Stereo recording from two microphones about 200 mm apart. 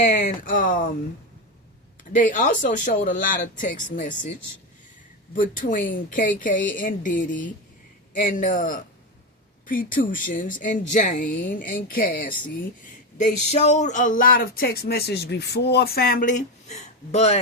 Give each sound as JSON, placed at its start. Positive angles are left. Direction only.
{"t": 0.0, "sound": "speech", "side_deg": 40}
{"t": 2.1, "sound": "speech", "side_deg": 40}
{"t": 5.3, "sound": "speech", "side_deg": 40}